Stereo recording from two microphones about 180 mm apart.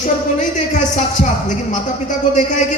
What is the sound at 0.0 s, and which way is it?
Speech, 45° left (ahead or behind).